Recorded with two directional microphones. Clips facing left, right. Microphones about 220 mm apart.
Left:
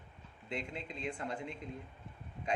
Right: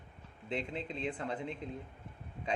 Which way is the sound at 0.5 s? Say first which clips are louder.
Right 4 dB; 30° right (ahead or behind).